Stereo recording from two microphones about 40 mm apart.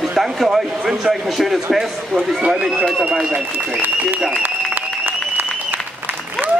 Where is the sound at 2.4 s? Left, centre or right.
Right.